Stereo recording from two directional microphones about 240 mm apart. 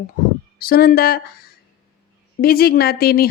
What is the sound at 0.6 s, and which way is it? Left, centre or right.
A woman's voice, left.